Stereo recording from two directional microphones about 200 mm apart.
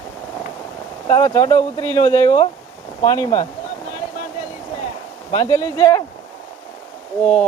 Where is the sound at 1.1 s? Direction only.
15° left (ahead or behind).